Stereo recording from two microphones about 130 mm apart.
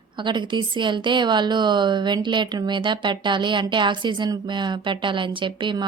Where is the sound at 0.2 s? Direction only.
35° right (ahead or behind).